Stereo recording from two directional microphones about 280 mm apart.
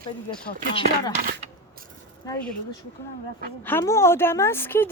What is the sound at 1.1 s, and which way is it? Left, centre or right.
Speech, right.